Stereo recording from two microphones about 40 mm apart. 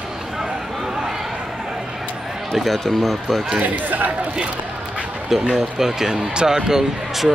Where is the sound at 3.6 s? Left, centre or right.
Right.